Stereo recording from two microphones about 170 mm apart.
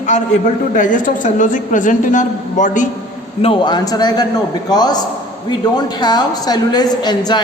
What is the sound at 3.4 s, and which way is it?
A woman's voice, 30° left (ahead or behind).